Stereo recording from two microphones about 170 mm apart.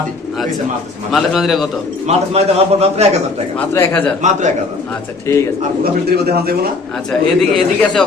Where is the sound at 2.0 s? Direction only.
40° right (ahead or behind).